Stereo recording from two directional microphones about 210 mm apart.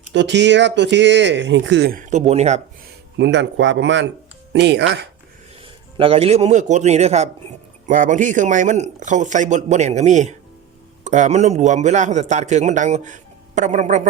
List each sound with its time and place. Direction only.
0.1 s speech: 55° right (ahead or behind); by 2.6 s 30° right (ahead or behind)
3.2 s speech: 60° right (ahead or behind)
5.6 s a man's voice: 25° right (ahead or behind)